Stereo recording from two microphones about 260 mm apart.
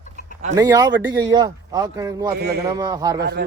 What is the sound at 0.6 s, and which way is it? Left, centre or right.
Speech, centre.